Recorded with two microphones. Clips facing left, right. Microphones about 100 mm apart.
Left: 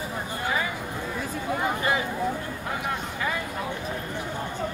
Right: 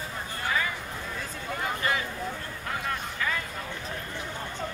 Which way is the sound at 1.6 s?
20° left (ahead or behind).